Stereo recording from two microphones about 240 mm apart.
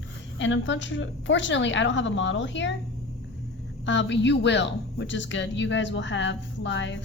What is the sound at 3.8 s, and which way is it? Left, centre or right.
Speech, left.